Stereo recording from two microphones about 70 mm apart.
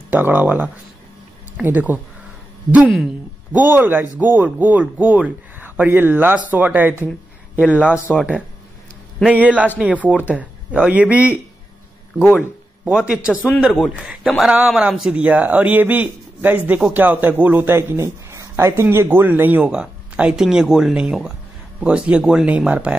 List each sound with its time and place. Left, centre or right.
0.1 s a man's voice: right
3.5 s a man's voice: right
5.9 s a man's voice: right
7.5 s a man's voice: left
7.9 s speech: centre
9.2 s a man's voice: right
12.8 s speech: centre
15.2 s a man's voice: right
17.7 s speech: right
19.7 s speech: centre